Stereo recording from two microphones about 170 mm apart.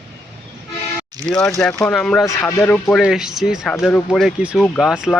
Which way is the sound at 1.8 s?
5° left (ahead or behind).